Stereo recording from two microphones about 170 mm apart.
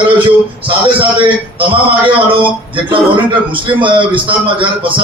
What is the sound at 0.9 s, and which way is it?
A man's voice, 30° right (ahead or behind).